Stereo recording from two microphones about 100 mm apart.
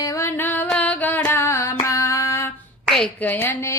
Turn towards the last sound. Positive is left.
turn(degrees=25)  # may be behind; listen again after turning